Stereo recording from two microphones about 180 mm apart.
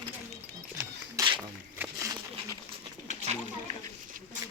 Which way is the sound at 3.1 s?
40° right (ahead or behind).